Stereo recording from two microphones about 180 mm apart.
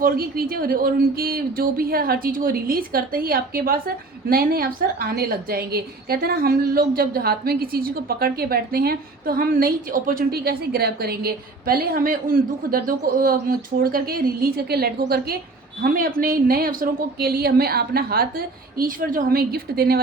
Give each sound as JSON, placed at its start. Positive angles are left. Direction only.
{"t": 0.0, "sound": "speech", "side_deg": -55}